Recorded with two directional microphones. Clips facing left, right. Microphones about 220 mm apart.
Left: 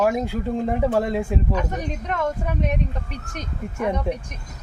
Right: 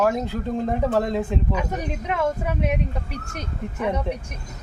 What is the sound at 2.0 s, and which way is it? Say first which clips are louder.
Speech: right 2 dB; 10° right (ahead or behind).